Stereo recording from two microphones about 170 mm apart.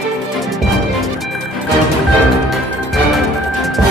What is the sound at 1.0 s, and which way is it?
Music, centre (ahead or behind).